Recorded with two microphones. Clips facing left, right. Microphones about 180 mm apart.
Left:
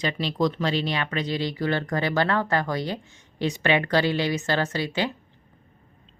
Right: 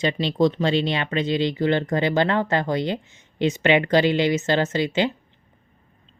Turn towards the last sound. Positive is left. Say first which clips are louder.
# right 5 dB
turn(degrees=-20)  # may be behind; listen again after turning